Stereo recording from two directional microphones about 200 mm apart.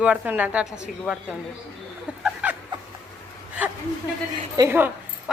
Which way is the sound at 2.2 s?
5° right (ahead or behind).